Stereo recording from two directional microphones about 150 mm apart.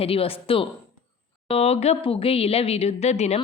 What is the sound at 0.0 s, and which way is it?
A woman's voice, 40° left (ahead or behind).